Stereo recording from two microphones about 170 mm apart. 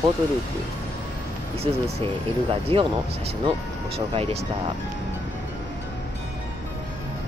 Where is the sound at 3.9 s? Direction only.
35° right (ahead or behind).